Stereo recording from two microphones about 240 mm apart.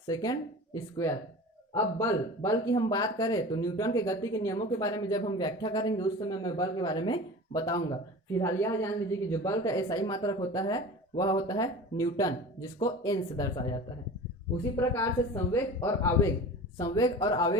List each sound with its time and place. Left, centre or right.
0.1 s speech: centre